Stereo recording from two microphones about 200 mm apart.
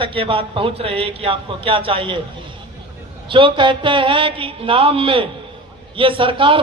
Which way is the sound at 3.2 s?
25° right (ahead or behind).